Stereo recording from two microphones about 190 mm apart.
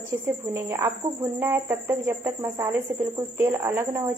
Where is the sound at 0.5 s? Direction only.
15° right (ahead or behind).